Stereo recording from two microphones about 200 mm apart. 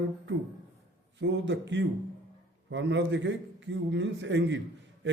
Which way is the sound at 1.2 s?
65° right (ahead or behind).